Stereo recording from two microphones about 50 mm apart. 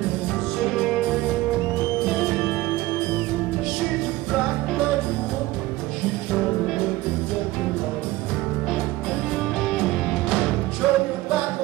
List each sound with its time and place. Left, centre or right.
0.6 s music: centre
10.8 s music: centre